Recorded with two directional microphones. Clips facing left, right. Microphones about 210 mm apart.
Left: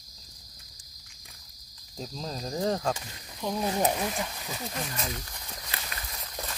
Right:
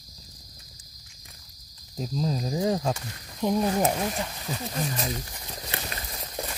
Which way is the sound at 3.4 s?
15° right (ahead or behind).